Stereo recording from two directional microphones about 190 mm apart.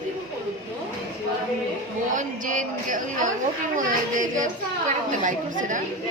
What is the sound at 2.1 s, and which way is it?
A woman's voice, 40° right (ahead or behind).